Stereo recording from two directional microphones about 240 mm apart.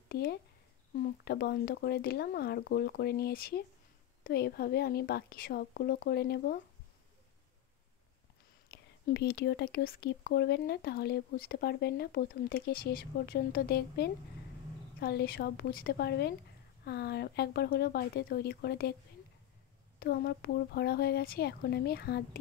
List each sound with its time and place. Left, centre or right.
0.1 s speech: left
8.6 s speech: left
20.0 s speech: left